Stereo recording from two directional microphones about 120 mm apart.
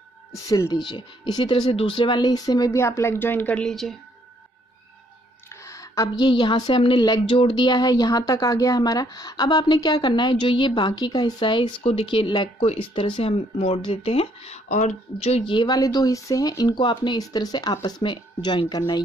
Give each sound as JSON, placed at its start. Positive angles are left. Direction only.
{"t": 0.8, "sound": "a woman's voice", "side_deg": 40}
{"t": 5.5, "sound": "a sound", "side_deg": 25}
{"t": 6.2, "sound": "a woman's voice", "side_deg": 40}
{"t": 15.5, "sound": "a woman's voice", "side_deg": 35}